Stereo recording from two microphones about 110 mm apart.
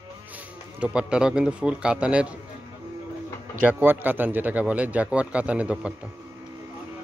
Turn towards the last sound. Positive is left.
turn(degrees=-10)  # may be behind; listen again after turning